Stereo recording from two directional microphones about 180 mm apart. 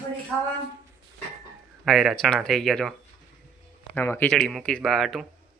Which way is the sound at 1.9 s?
Centre (ahead or behind).